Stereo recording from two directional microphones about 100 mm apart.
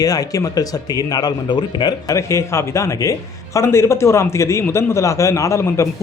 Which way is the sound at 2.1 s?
30° left (ahead or behind).